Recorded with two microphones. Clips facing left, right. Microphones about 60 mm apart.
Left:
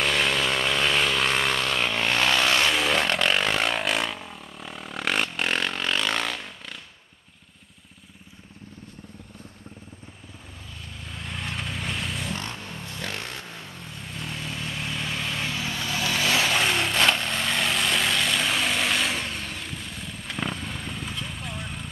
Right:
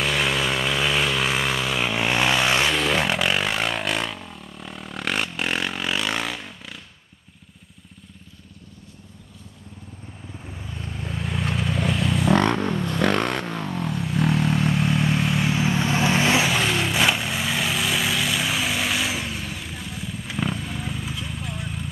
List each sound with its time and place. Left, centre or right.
0.0 s vehicle: centre
2.7 s vehicle: centre
10.8 s vehicle: right
11.1 s vehicle: centre
12.3 s vehicle: right
15.0 s vehicle: centre
15.5 s vehicle: right
16.4 s vehicle: centre